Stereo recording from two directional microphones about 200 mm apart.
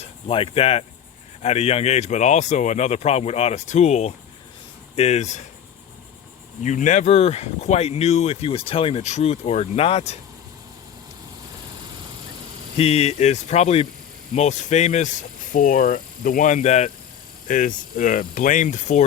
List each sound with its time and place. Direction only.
0.0 s speech: 30° left (ahead or behind)
6.6 s speech: 35° left (ahead or behind)
12.7 s speech: 30° left (ahead or behind)